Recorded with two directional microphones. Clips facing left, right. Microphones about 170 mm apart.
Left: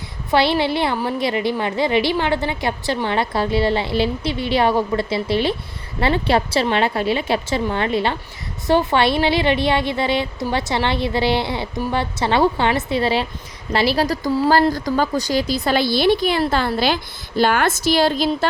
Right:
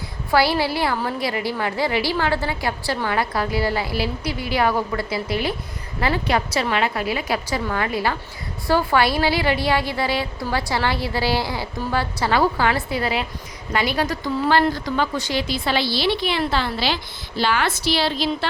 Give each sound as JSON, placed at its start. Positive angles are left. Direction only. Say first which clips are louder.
{"t": 0.3, "sound": "a woman's voice", "louder": "left 2 dB", "side_deg": 25}